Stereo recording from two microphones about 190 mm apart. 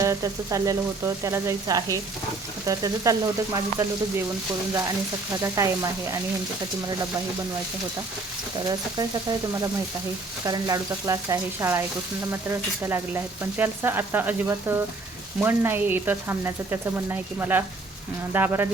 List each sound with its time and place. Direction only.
0.0 s frying: 15° right (ahead or behind)
5.4 s frying: 15° right (ahead or behind)
10.4 s frying: 20° right (ahead or behind)